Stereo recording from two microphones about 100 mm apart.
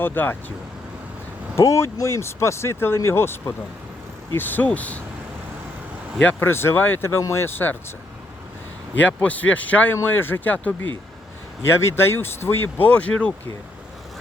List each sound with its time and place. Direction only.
0.0 s speech: 20° left (ahead or behind)
1.5 s speech: 30° left (ahead or behind); by 5.0 s 15° left (ahead or behind)
6.2 s speech: 25° left (ahead or behind)
9.0 s speech: 15° left (ahead or behind)
11.7 s speech: 25° left (ahead or behind)